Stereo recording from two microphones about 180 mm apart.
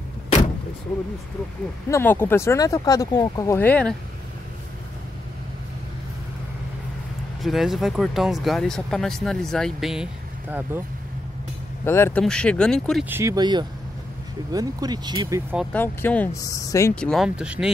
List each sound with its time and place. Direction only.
1.9 s speech: 10° left (ahead or behind)
7.4 s speech: centre (ahead or behind)
11.8 s speech: 15° left (ahead or behind)
13.1 s speech: 15° right (ahead or behind)
15.7 s speech: 10° left (ahead or behind)
16.9 s speech: 5° left (ahead or behind)